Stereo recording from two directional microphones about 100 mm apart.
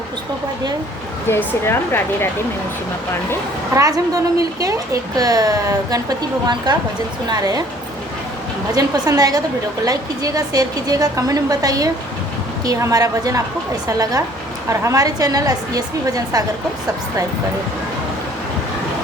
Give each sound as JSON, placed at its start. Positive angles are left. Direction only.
{"t": 1.3, "sound": "speech", "side_deg": 25}
{"t": 3.8, "sound": "a woman's voice", "side_deg": -35}
{"t": 8.7, "sound": "a woman's voice", "side_deg": -40}